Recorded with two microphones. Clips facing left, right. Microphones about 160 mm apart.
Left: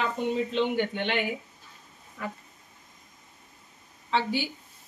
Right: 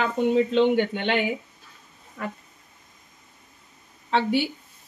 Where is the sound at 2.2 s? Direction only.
65° right (ahead or behind).